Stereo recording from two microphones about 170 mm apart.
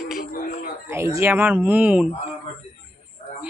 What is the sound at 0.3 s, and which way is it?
Music, 55° left (ahead or behind).